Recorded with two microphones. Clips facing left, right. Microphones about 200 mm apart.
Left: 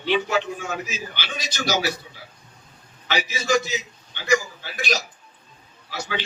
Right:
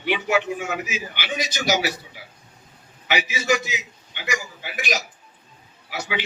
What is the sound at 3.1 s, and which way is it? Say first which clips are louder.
A man's voice: even; 15° right (ahead or behind).